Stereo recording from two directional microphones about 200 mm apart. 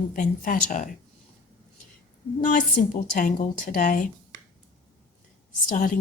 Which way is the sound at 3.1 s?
40° left (ahead or behind).